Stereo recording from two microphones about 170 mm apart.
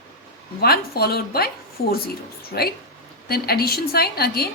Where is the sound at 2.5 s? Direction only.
65° left (ahead or behind).